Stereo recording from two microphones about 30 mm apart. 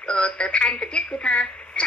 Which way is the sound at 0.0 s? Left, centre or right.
Left.